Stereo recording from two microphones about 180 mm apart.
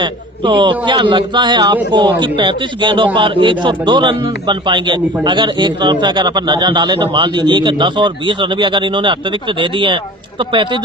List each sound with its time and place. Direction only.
0.0 s a man's voice: 25° right (ahead or behind)